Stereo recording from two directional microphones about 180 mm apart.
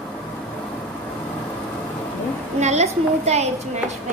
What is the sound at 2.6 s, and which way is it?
A woman's voice, 40° right (ahead or behind).